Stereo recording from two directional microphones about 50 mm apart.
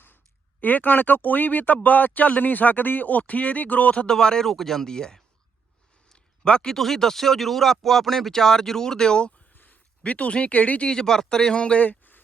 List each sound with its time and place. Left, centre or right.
0.6 s speech: left
4.0 s speech: centre
6.1 s a sound: centre
6.7 s speech: centre
10.0 s speech: left
10.8 s speech: centre
11.9 s a sound: left